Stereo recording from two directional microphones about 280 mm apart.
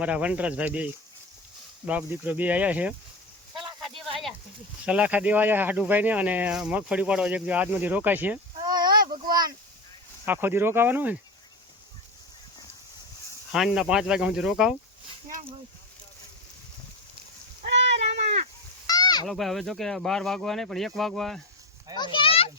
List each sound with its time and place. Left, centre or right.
0.0 s speech: centre
1.9 s speech: centre
4.9 s speech: centre
8.7 s a sound: right
10.2 s speech: centre
13.5 s speech: centre
17.6 s a sound: right
18.9 s goat: centre
19.3 s speech: centre
21.9 s a sound: centre